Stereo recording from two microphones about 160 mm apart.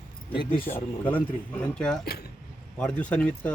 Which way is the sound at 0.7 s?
10° left (ahead or behind).